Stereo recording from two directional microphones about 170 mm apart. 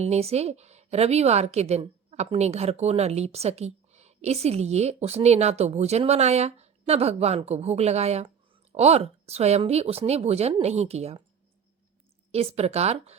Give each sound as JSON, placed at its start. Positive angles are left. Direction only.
{"t": 0.0, "sound": "a woman's voice", "side_deg": -40}
{"t": 12.3, "sound": "a woman's voice", "side_deg": -40}